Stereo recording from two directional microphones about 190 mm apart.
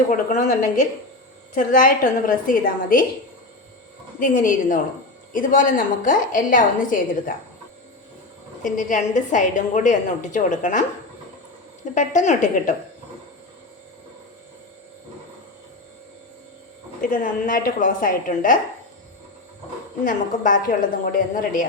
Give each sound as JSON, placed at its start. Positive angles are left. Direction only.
{"t": 0.1, "sound": "a woman's voice", "side_deg": 40}
{"t": 4.2, "sound": "a woman's voice", "side_deg": 45}
{"t": 8.6, "sound": "a woman's voice", "side_deg": 45}
{"t": 11.9, "sound": "a woman's voice", "side_deg": 40}
{"t": 17.0, "sound": "a woman's voice", "side_deg": 45}
{"t": 20.1, "sound": "a woman's voice", "side_deg": 45}